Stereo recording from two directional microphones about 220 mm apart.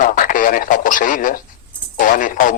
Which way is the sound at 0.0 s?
35° left (ahead or behind).